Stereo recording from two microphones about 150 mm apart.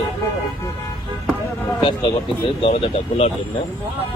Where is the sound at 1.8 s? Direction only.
35° left (ahead or behind).